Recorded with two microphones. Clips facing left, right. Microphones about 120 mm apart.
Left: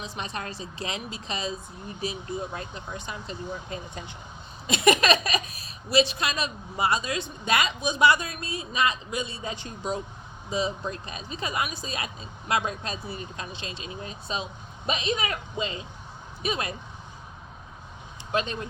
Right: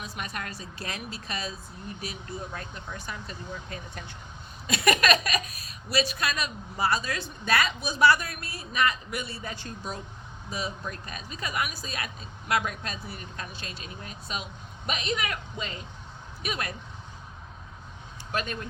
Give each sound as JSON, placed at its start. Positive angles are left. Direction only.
{"t": 0.0, "sound": "speech", "side_deg": 25}
{"t": 18.3, "sound": "speech", "side_deg": 25}